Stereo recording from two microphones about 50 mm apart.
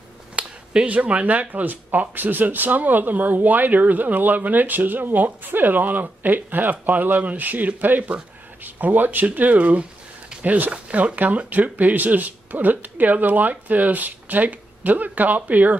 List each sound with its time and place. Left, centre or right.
0.4 s speech: right